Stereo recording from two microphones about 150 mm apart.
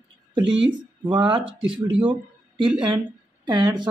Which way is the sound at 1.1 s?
35° right (ahead or behind).